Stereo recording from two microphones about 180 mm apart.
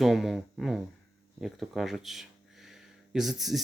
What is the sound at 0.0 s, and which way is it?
Speech, centre (ahead or behind).